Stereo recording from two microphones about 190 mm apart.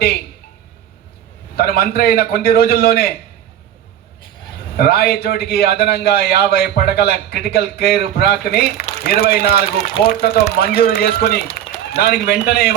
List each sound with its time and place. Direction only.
1.5 s a man's voice: 55° left (ahead or behind)
4.8 s a man's voice: 55° left (ahead or behind)